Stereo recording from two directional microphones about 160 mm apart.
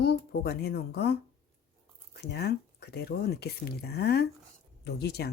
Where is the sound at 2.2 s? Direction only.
90° left.